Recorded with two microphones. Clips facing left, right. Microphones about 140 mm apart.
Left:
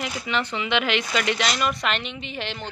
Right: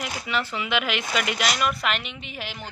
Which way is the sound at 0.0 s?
5° right (ahead or behind).